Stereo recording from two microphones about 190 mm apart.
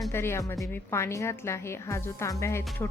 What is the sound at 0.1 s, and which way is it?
A woman's voice, 15° left (ahead or behind).